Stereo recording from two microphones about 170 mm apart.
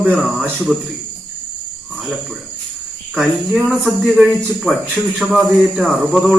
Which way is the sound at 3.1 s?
10° right (ahead or behind).